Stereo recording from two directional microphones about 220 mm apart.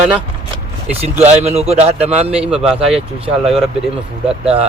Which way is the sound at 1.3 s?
30° right (ahead or behind).